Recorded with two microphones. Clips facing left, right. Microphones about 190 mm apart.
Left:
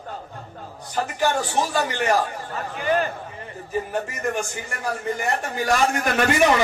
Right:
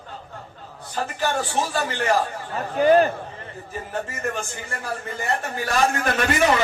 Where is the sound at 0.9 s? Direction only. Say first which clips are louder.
Left 2 dB; 15° left (ahead or behind).